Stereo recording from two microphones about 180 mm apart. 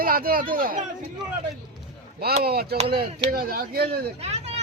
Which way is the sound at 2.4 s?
60° right (ahead or behind).